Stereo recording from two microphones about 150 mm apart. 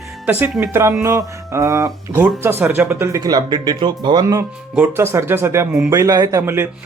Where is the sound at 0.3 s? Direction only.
10° right (ahead or behind).